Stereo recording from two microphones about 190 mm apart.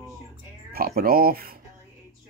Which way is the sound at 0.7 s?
50° right (ahead or behind).